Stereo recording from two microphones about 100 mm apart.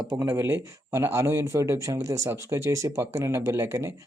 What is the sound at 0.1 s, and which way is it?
Speech, 30° right (ahead or behind).